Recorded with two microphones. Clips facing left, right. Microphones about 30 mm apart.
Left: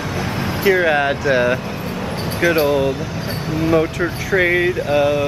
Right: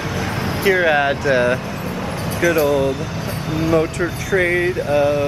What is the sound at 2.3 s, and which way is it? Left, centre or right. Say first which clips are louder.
Speech: even; left.